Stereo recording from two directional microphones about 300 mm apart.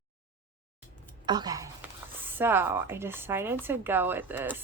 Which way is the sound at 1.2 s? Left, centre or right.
Centre.